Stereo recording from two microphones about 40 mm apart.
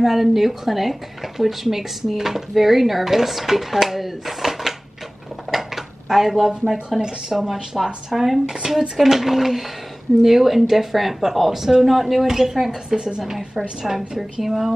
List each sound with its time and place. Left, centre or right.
0.0 s speech: centre
5.5 s dishes: centre
7.0 s speech: centre
12.9 s a woman's voice: right
13.2 s speech: centre